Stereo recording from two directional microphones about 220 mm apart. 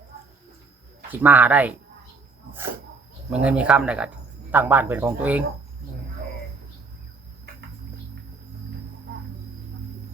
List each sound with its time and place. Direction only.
1.1 s speech: 10° right (ahead or behind)
3.2 s speech: 5° right (ahead or behind)